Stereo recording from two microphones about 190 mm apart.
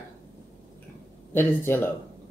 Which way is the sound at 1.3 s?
10° left (ahead or behind).